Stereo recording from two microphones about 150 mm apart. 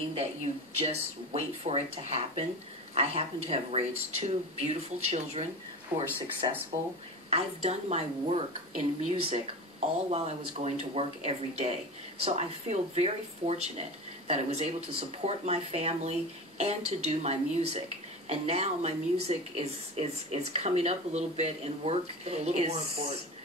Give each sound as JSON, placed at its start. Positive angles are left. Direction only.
{"t": 0.7, "sound": "speech", "side_deg": -45}
{"t": 5.9, "sound": "speech", "side_deg": -10}
{"t": 7.2, "sound": "a woman's voice", "side_deg": -45}